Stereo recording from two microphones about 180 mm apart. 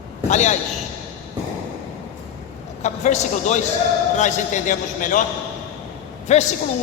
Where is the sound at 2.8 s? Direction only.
40° left (ahead or behind).